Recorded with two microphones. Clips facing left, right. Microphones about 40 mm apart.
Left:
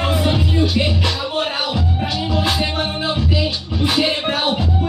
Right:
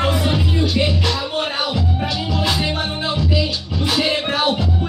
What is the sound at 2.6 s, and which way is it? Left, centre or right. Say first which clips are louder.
Music: left 1 dB; centre.